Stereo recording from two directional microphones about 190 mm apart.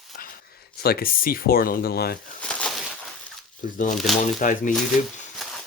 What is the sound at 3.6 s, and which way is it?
Speech, 45° left (ahead or behind).